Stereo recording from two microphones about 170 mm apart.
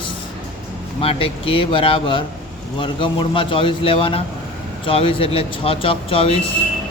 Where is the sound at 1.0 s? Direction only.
35° left (ahead or behind).